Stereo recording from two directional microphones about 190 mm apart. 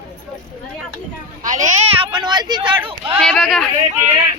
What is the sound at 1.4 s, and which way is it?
Speech, 40° right (ahead or behind).